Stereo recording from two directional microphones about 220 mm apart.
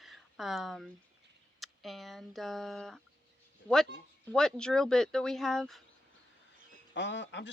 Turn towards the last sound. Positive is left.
turn(degrees=55)  # may be behind; listen again after turning